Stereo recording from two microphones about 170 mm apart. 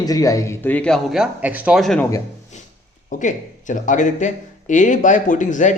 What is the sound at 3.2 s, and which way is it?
Speech, 50° left (ahead or behind).